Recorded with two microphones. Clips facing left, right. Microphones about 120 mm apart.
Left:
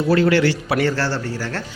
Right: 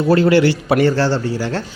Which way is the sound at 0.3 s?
15° right (ahead or behind).